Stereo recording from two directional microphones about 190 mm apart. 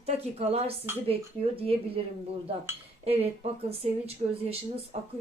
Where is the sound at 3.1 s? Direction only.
30° right (ahead or behind).